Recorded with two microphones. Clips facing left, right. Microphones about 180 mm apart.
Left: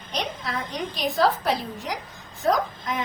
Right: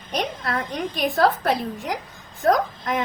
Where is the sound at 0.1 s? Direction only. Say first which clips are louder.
Right 4 dB; 55° right (ahead or behind).